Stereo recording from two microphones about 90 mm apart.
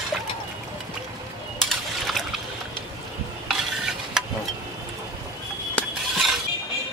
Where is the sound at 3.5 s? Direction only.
5° right (ahead or behind).